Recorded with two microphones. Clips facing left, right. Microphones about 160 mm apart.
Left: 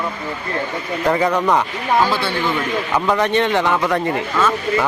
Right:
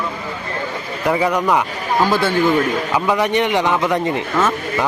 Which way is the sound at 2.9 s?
10° right (ahead or behind).